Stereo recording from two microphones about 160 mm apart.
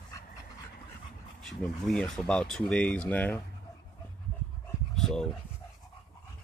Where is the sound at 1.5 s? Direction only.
5° left (ahead or behind).